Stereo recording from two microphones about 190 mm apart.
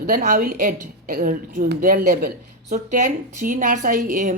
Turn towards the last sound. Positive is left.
turn(degrees=-40)  # may be behind; listen again after turning